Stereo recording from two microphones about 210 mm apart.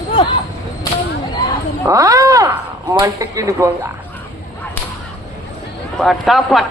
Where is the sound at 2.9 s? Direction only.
15° right (ahead or behind).